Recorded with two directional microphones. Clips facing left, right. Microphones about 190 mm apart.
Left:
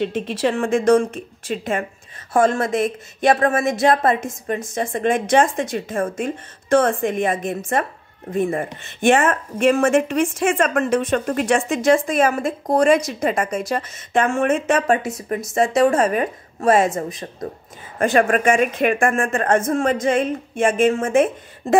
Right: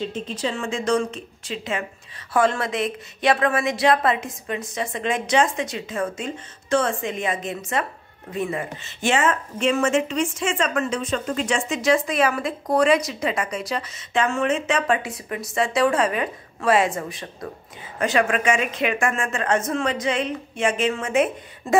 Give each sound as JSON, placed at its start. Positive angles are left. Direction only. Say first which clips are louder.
{"t": 0.0, "sound": "speech", "louder": "left 6 dB", "side_deg": 60}